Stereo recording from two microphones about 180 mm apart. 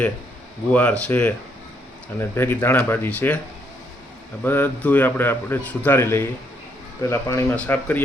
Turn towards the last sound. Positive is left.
turn(degrees=10)  # may be behind; listen again after turning